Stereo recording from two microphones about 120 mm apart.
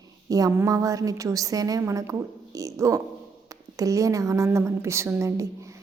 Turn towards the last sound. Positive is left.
turn(degrees=-25)  # may be behind; listen again after turning